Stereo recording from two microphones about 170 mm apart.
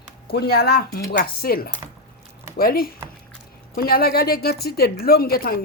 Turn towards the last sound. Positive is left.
turn(degrees=60)  # may be behind; listen again after turning